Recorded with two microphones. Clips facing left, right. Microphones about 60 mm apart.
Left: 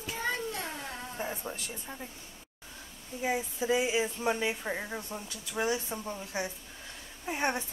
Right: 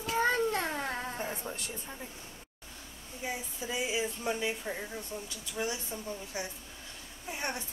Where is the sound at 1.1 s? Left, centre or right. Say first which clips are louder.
Left 1 dB; centre.